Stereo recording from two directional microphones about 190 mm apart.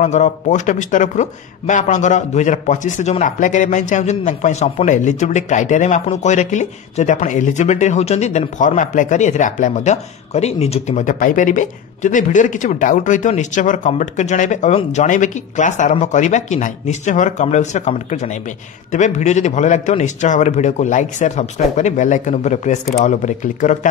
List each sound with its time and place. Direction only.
0.0 s speech: 40° left (ahead or behind)